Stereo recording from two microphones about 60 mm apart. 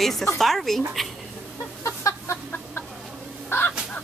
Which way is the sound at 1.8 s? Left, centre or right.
Left.